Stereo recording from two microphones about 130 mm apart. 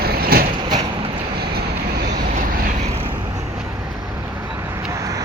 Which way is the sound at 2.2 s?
90° right.